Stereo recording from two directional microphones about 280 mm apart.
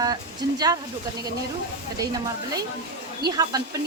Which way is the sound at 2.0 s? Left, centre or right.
Centre.